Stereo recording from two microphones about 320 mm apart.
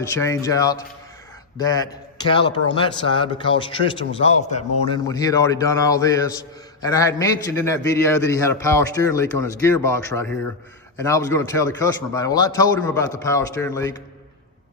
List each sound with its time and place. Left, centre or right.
0.1 s speech: centre